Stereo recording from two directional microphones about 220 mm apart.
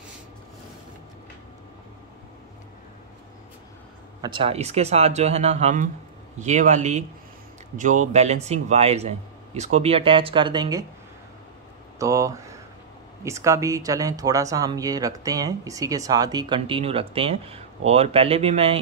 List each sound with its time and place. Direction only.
4.2 s a man's voice: 25° right (ahead or behind)
12.0 s a man's voice: 15° right (ahead or behind)